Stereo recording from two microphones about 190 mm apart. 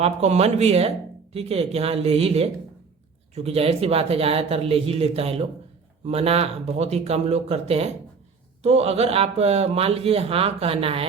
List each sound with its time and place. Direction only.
0.0 s speech: 35° right (ahead or behind)